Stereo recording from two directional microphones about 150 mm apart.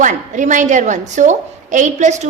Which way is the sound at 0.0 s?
55° right (ahead or behind).